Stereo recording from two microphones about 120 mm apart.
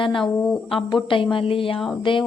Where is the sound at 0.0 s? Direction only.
45° left (ahead or behind).